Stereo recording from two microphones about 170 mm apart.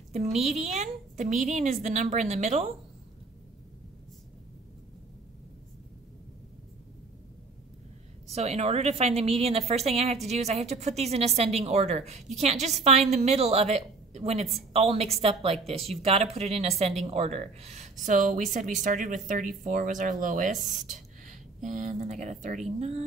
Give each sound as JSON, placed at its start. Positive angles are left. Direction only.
{"t": 0.1, "sound": "a woman's voice", "side_deg": -40}
{"t": 8.4, "sound": "a woman's voice", "side_deg": -40}